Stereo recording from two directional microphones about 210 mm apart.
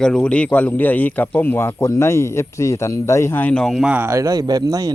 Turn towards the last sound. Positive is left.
turn(degrees=-15)  # may be behind; listen again after turning